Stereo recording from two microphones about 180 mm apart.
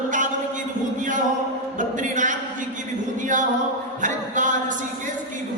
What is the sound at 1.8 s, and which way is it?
Music, 45° right (ahead or behind).